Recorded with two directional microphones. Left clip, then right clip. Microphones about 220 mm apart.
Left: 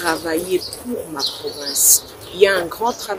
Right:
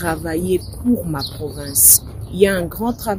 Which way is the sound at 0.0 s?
55° right (ahead or behind).